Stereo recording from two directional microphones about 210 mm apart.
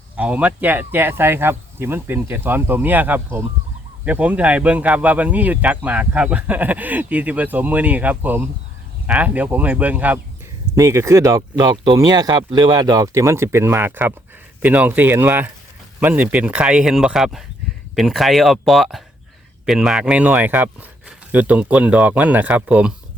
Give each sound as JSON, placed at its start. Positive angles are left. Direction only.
{"t": 0.2, "sound": "speech", "side_deg": -5}